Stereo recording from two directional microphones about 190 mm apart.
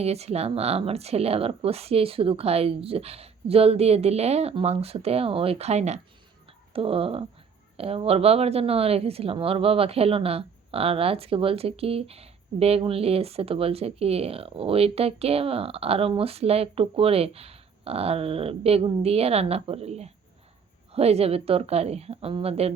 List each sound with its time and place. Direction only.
0.0 s a woman's voice: 35° right (ahead or behind)